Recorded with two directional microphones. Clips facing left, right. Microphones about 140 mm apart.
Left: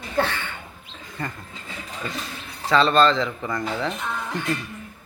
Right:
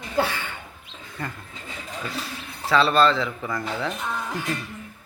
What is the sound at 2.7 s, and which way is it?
A man's voice, 5° right (ahead or behind).